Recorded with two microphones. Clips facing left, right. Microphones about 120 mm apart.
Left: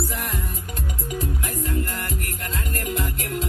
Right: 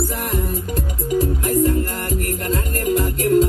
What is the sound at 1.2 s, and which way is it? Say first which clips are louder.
Music: right 13 dB; 40° right (ahead or behind).